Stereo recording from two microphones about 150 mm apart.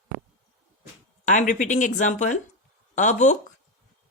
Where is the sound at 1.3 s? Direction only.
55° left (ahead or behind).